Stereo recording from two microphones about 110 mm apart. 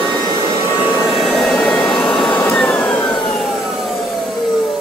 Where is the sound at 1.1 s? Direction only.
Centre (ahead or behind).